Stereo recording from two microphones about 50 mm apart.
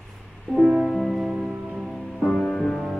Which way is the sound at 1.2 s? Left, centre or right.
Centre.